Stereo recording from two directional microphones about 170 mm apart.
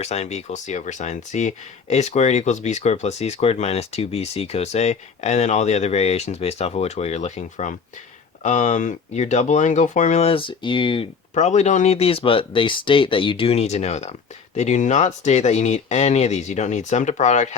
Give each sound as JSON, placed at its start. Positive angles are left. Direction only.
{"t": 0.0, "sound": "speech", "side_deg": 40}